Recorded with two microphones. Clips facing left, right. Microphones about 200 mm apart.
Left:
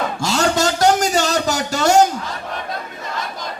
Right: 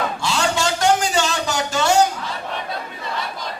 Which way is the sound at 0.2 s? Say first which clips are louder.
Left 7 dB; 40° left (ahead or behind).